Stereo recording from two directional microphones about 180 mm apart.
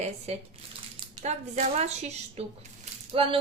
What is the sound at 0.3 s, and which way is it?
Speech, 35° right (ahead or behind).